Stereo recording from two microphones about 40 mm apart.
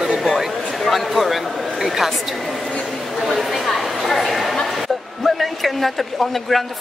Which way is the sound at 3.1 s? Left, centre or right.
Centre.